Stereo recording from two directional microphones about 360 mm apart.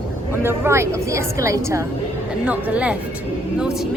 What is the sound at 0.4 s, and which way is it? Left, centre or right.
A woman's voice, centre.